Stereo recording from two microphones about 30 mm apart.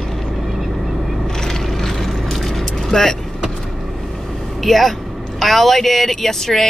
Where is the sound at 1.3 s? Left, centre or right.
Centre.